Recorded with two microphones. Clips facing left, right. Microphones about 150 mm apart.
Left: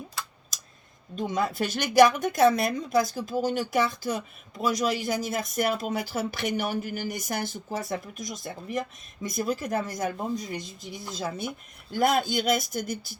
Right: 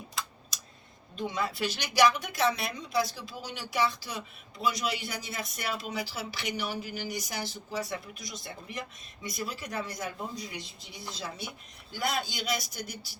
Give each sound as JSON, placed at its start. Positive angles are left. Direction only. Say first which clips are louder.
{"t": 1.1, "sound": "a woman's voice", "louder": "left 5 dB", "side_deg": 45}